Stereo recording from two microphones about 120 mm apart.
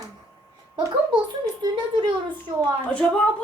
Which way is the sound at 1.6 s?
45° right (ahead or behind).